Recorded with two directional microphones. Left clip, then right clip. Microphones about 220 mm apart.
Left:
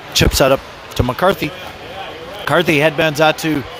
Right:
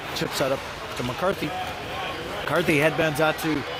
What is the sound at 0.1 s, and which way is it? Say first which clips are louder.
Speech: left 13 dB; 35° left (ahead or behind).